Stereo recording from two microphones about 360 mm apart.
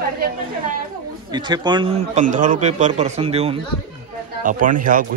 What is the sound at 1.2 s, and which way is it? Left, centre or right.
A man's voice, centre.